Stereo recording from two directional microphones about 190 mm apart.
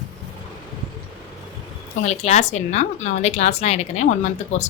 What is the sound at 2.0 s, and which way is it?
A woman's voice, 35° left (ahead or behind).